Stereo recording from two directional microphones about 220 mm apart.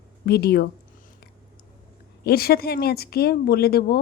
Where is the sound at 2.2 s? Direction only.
45° left (ahead or behind).